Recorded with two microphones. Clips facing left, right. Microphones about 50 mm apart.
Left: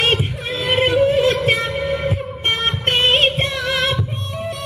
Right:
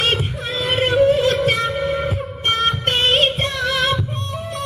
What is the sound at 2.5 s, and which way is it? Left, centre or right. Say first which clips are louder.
Music: right 1 dB; left.